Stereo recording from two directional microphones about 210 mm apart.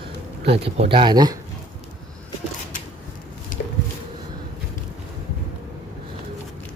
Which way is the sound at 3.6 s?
45° left (ahead or behind).